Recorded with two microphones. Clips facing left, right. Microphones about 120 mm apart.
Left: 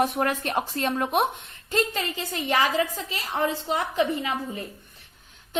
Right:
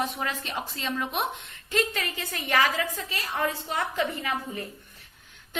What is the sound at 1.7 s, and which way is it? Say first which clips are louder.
A woman's voice: left 2 dB; 30° left (ahead or behind).